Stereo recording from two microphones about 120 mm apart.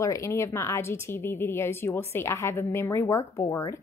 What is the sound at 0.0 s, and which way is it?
A woman's voice, 25° left (ahead or behind).